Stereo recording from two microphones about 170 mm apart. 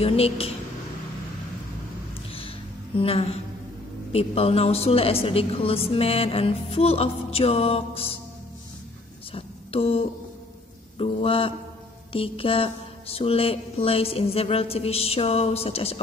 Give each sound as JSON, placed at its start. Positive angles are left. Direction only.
{"t": 0.0, "sound": "a woman's voice", "side_deg": 35}
{"t": 3.0, "sound": "a woman's voice", "side_deg": 35}
{"t": 9.3, "sound": "a woman's voice", "side_deg": 35}